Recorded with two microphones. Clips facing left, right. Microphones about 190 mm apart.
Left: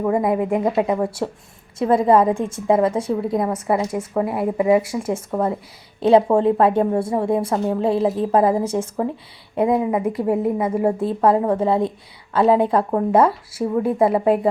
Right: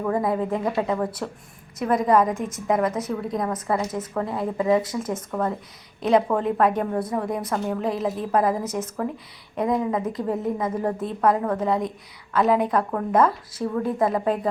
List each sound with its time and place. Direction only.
0.0 s a woman's voice: 20° left (ahead or behind)